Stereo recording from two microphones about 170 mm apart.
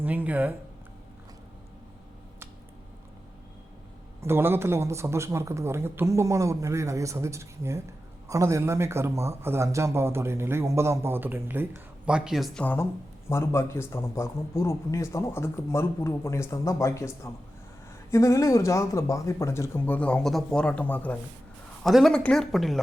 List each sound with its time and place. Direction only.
0.0 s speech: 10° right (ahead or behind)
4.2 s speech: 15° right (ahead or behind)
12.6 s a man's voice: 15° left (ahead or behind)